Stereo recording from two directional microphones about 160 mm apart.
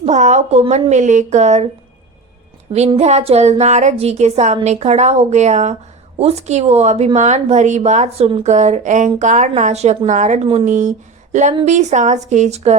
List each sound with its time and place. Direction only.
0.0 s speech: 45° right (ahead or behind)
3.0 s speech: 45° right (ahead or behind)